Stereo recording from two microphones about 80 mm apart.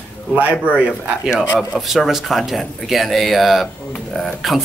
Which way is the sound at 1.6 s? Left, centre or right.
Centre.